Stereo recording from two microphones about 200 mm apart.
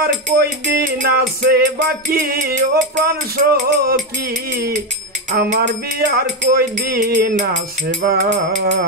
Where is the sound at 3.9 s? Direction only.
50° right (ahead or behind).